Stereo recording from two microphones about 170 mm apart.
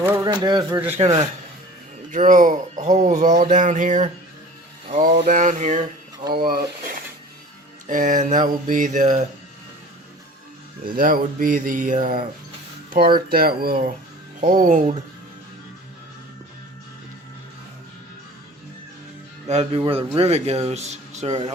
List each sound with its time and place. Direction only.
0.0 s shuffling cards: 15° right (ahead or behind)
0.3 s speech: 25° right (ahead or behind)
2.1 s speech: 50° right (ahead or behind)
6.3 s speech: 60° right (ahead or behind)
10.9 s speech: 55° right (ahead or behind)
14.4 s speech: 50° right (ahead or behind)
19.5 s speech: 40° right (ahead or behind)